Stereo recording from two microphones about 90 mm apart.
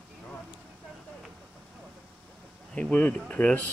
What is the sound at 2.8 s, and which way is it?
Speech, 15° left (ahead or behind).